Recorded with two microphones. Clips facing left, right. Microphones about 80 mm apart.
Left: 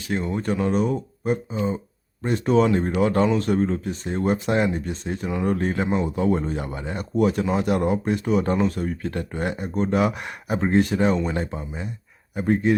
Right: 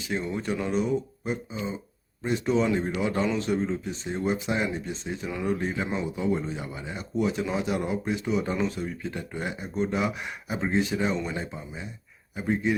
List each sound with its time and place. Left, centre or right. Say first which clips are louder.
0.2 s speech: left 4 dB; left
0.7 s speech: left 3 dB; left